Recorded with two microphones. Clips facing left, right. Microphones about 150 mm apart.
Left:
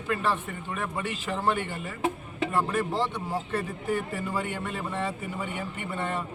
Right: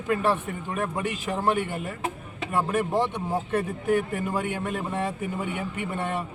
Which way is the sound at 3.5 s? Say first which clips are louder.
Right 7 dB; 50° right (ahead or behind).